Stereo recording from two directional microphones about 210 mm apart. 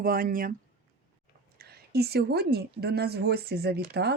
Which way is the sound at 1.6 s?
50° right (ahead or behind).